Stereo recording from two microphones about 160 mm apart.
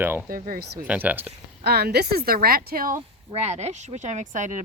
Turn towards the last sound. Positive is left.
turn(degrees=-50)  # may be behind; listen again after turning